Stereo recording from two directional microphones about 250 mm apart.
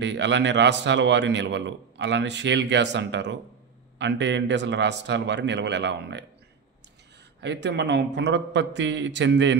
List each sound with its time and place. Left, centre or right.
0.0 s a man's voice: right
7.3 s a man's voice: right